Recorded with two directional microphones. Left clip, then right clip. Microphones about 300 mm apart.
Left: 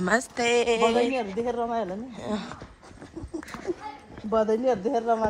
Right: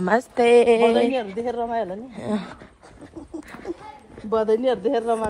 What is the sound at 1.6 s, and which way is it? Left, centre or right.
Speech, right.